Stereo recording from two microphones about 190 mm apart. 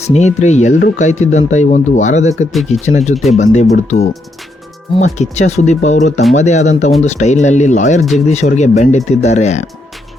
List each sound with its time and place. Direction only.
0.1 s speech: 35° left (ahead or behind)
2.5 s speech: centre (ahead or behind)
2.8 s speech: 35° left (ahead or behind)